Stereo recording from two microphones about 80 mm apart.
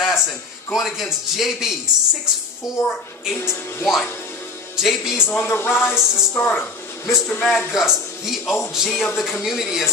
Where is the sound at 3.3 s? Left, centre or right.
Left.